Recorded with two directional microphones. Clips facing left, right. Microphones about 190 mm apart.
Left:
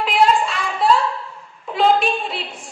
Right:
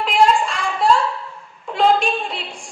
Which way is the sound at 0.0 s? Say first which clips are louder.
Even; centre (ahead or behind).